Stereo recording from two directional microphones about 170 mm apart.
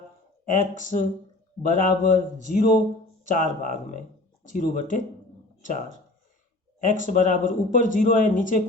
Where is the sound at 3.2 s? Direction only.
50° left (ahead or behind).